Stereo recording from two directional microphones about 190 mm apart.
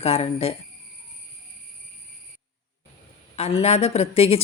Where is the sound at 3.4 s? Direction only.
35° left (ahead or behind).